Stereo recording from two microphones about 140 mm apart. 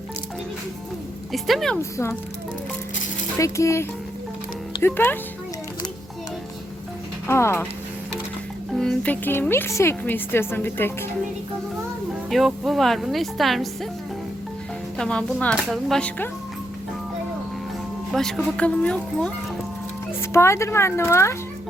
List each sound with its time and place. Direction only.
1.3 s speech: centre (ahead or behind)
1.8 s speech: 20° left (ahead or behind)
3.3 s speech: 20° left (ahead or behind)
7.3 s speech: 20° left (ahead or behind)
8.7 s speech: 5° left (ahead or behind)
12.3 s speech: centre (ahead or behind)
14.9 s speech: 5° left (ahead or behind)
18.1 s speech: 5° left (ahead or behind)
20.3 s speech: 20° left (ahead or behind)